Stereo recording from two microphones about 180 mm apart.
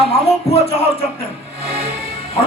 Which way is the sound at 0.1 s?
35° left (ahead or behind).